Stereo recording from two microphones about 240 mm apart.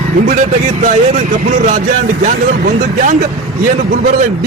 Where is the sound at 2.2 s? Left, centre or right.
Right.